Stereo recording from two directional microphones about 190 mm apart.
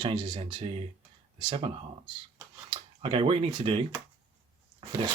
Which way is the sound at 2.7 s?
30° right (ahead or behind).